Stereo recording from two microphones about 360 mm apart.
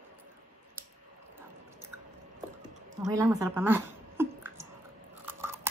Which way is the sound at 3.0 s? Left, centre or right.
Centre.